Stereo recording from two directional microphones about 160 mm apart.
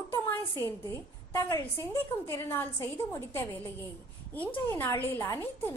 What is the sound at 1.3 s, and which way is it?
A woman's voice, 20° left (ahead or behind).